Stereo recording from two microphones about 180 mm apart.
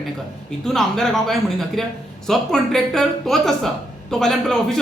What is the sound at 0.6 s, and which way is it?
A man's voice, 5° left (ahead or behind).